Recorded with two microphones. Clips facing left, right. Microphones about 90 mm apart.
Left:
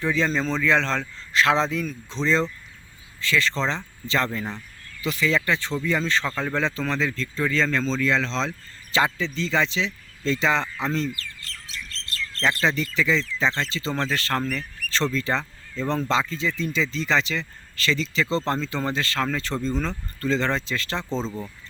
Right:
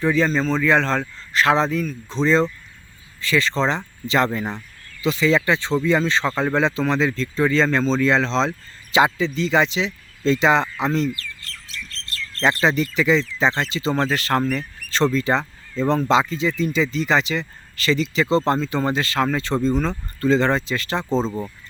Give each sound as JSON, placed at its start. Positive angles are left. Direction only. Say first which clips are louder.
{"t": 0.0, "sound": "speech", "louder": "right 4 dB", "side_deg": -10}
{"t": 2.0, "sound": "speech", "louder": "right 5 dB", "side_deg": -15}
{"t": 8.9, "sound": "speech", "louder": "right 5 dB", "side_deg": -15}
{"t": 12.6, "sound": "speech", "louder": "right 5 dB", "side_deg": -15}